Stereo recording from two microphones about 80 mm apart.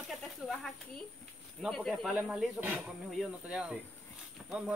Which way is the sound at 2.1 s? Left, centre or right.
Centre.